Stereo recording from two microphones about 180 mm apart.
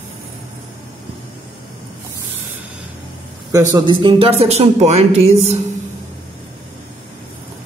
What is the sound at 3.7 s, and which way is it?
Speech, 25° right (ahead or behind).